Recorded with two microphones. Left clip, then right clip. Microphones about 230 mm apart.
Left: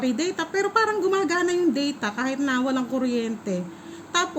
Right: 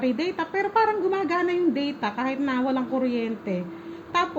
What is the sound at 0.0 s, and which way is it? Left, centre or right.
A woman's voice, centre.